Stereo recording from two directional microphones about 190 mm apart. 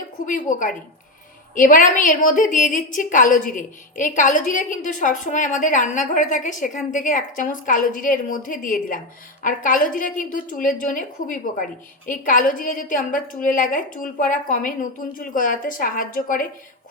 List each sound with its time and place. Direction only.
0.3 s a woman's voice: 45° left (ahead or behind)